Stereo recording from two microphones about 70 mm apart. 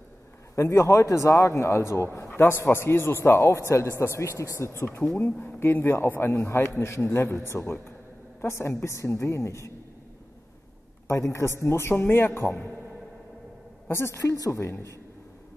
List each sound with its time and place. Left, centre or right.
0.6 s speech: left
11.1 s speech: left
13.8 s speech: left